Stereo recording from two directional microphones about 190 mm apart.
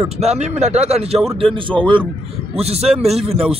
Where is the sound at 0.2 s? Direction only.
35° right (ahead or behind).